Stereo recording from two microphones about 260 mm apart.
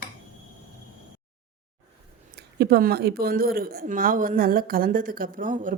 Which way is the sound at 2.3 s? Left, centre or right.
Right.